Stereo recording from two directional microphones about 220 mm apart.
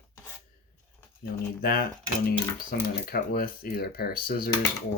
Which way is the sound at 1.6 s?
40° left (ahead or behind).